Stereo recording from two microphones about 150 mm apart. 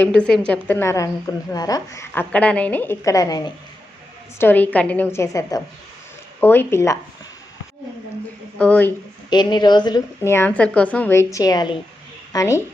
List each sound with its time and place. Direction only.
0.0 s a woman's voice: 5° left (ahead or behind); by 3.5 s 25° left (ahead or behind)
4.4 s a woman's voice: 15° left (ahead or behind)
8.5 s a woman's voice: 10° left (ahead or behind)
9.3 s a woman's voice: 30° left (ahead or behind)
10.6 s a woman's voice: 5° left (ahead or behind)